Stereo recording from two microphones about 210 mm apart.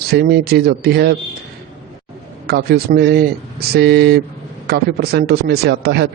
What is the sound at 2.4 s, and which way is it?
A man's voice, 50° right (ahead or behind).